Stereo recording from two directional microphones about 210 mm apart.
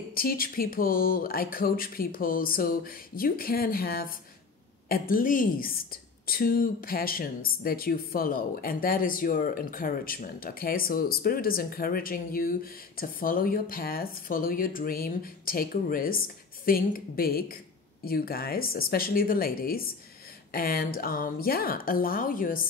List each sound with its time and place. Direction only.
0.1 s a woman's voice: 45° left (ahead or behind)